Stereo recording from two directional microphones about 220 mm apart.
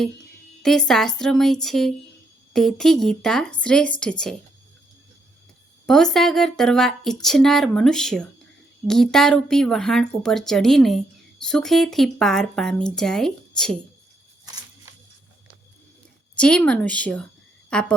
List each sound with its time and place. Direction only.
0.6 s speech: centre (ahead or behind)
5.8 s speech: 5° left (ahead or behind)
14.4 s a sound: 15° right (ahead or behind)
16.4 s speech: 5° left (ahead or behind)